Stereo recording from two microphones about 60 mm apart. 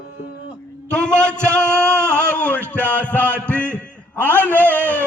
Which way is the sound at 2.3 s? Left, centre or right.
Left.